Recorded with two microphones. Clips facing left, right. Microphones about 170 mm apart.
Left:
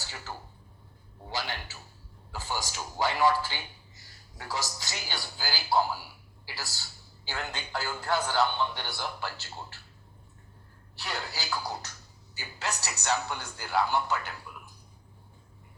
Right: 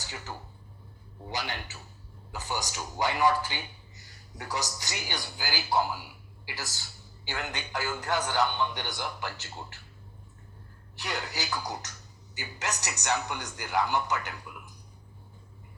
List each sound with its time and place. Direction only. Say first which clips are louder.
0.0 s a woman's voice: right 1 dB; 15° right (ahead or behind)
10.9 s speech: right 2 dB; 15° right (ahead or behind)